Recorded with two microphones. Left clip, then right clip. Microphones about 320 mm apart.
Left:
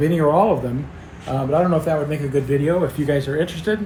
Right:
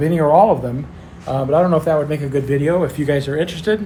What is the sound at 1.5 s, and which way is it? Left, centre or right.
Speech, centre.